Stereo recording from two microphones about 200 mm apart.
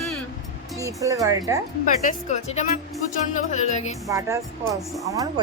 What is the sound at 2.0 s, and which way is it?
Music, 35° left (ahead or behind).